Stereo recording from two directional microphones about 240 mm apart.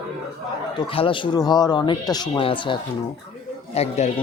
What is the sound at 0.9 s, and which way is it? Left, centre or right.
Speech, left.